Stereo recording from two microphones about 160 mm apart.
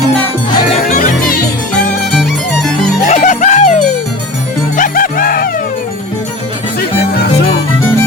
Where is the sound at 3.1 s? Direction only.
45° left (ahead or behind).